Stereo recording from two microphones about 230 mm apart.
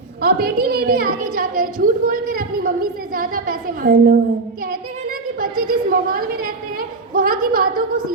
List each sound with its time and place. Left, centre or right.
0.2 s a woman's voice: right
5.4 s a woman's voice: right